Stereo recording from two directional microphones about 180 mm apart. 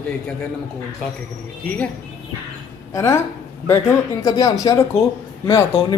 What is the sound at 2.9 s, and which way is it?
A woman's voice, 15° left (ahead or behind).